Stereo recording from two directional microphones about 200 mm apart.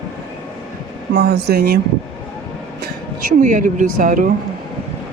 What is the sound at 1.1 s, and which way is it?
Speech, 55° right (ahead or behind).